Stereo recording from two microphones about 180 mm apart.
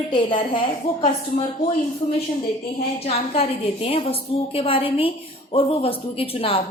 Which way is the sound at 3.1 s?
35° left (ahead or behind).